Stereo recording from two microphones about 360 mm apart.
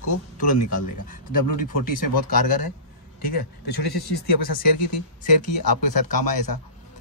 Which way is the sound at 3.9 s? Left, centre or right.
Left.